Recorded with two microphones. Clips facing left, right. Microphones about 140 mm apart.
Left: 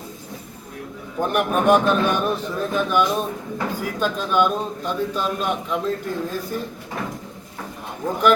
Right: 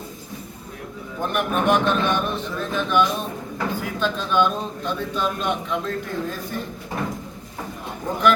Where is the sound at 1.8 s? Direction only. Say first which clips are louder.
Left 2 dB; 10° left (ahead or behind).